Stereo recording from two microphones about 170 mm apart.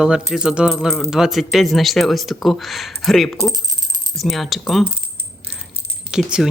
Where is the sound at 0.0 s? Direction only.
5° right (ahead or behind).